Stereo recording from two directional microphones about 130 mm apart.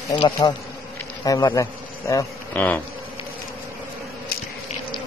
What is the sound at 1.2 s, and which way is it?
Speech, 25° left (ahead or behind).